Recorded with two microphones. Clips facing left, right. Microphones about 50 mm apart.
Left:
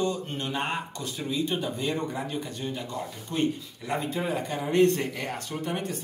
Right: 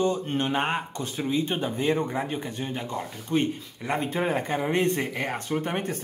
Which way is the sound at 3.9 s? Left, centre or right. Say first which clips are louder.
Right 2 dB; right.